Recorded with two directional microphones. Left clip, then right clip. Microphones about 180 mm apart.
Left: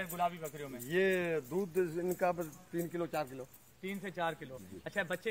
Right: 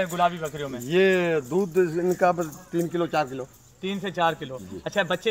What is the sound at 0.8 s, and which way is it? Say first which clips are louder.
Speech: right 11 dB; 5° left (ahead or behind).